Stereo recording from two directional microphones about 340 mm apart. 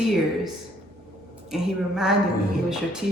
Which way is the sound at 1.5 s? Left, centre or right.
Centre.